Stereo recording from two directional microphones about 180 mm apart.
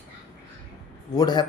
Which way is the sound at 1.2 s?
25° left (ahead or behind).